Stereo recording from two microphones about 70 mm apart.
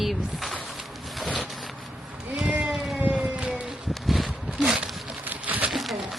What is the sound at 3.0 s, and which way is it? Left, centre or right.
Siren, centre.